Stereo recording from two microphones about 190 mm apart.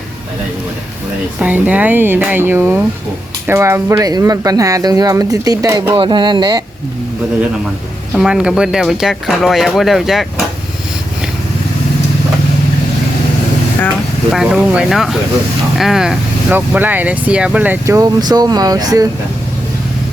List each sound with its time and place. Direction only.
1.4 s speech: 10° right (ahead or behind)
8.1 s speech: 5° right (ahead or behind)
14.3 s speech: centre (ahead or behind); by 19.0 s 20° right (ahead or behind)